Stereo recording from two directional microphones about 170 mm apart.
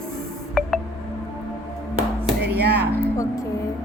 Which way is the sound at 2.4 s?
70° right (ahead or behind).